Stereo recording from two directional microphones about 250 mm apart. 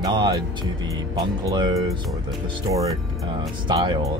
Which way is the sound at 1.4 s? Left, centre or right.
Centre.